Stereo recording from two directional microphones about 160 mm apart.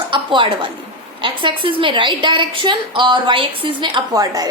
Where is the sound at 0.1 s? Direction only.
30° right (ahead or behind).